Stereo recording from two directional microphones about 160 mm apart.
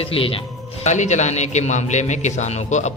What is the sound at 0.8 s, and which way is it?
A man's voice, 45° left (ahead or behind).